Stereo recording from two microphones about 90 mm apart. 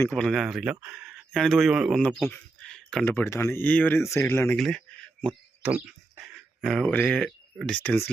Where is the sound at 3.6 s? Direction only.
20° left (ahead or behind).